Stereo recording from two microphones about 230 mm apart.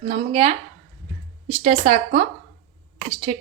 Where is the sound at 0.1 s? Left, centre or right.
Right.